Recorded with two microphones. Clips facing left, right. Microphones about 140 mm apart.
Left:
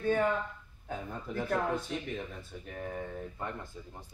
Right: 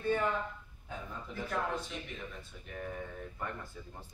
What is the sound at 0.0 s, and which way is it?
Speech, 50° left (ahead or behind).